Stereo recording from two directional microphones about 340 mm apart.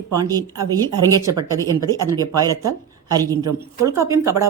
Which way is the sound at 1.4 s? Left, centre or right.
Centre.